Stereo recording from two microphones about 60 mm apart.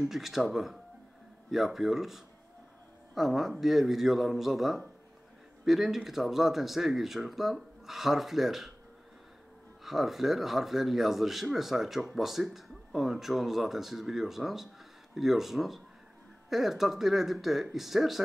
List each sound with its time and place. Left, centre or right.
0.1 s speech: centre
9.8 s speech: centre